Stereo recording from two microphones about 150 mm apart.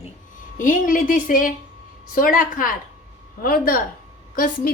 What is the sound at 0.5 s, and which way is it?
A woman's voice, 65° left (ahead or behind).